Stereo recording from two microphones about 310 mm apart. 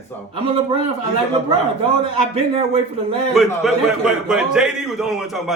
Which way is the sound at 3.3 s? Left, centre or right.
Centre.